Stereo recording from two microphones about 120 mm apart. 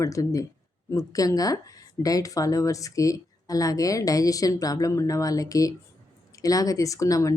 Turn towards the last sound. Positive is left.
turn(degrees=25)  # may be behind; listen again after turning